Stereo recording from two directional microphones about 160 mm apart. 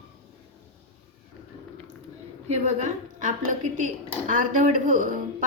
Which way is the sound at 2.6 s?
50° right (ahead or behind).